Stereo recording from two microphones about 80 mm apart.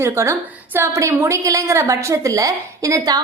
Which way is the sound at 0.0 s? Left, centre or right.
Right.